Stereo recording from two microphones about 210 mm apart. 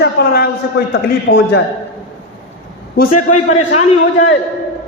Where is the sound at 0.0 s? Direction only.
50° left (ahead or behind).